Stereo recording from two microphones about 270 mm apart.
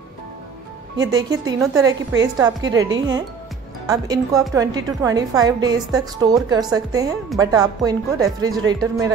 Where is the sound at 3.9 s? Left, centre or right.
Centre.